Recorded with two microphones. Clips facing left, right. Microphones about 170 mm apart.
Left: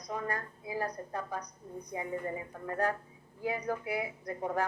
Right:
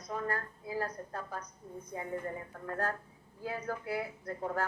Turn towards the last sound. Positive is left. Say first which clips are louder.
# left 2 dB
turn(degrees=15)  # may be behind; listen again after turning